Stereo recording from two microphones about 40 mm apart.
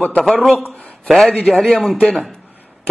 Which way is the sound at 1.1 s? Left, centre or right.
Centre.